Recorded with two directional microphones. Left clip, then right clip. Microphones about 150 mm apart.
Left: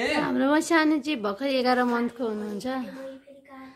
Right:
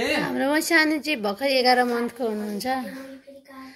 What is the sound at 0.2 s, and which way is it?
A woman's voice, 25° left (ahead or behind).